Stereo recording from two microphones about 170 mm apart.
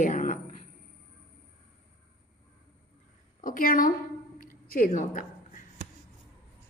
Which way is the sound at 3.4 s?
55° left (ahead or behind).